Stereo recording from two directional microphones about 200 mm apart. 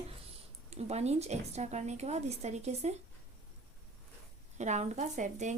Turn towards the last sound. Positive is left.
turn(degrees=-35)  # may be behind; listen again after turning